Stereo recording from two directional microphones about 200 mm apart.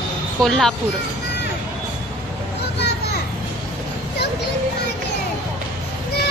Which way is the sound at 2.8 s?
55° left (ahead or behind).